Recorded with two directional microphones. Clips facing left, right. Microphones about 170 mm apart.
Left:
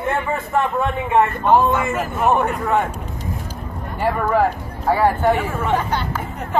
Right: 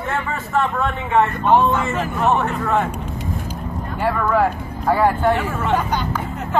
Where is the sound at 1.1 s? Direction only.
5° left (ahead or behind).